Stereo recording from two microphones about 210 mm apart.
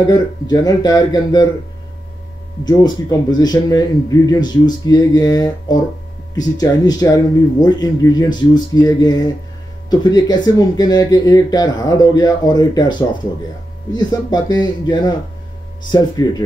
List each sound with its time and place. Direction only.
0.0 s speech: 20° left (ahead or behind)
2.6 s speech: 20° left (ahead or behind)